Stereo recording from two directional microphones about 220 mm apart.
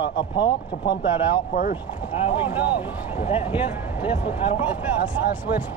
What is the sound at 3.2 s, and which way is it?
Speech, 25° left (ahead or behind).